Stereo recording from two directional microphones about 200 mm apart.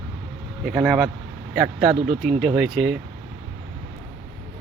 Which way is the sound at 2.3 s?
5° right (ahead or behind).